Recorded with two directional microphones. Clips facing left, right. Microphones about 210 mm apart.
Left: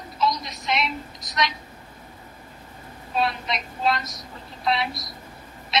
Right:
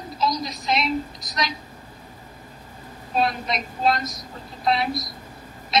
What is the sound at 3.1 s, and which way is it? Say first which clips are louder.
A woman's voice: right 2 dB; 40° right (ahead or behind).